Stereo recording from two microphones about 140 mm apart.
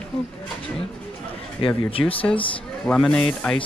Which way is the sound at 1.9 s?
40° left (ahead or behind).